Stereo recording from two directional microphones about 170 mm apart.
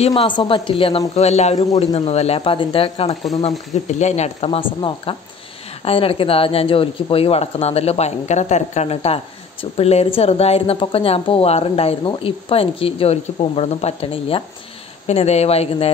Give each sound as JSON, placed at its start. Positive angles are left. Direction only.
{"t": 0.3, "sound": "speech", "side_deg": 30}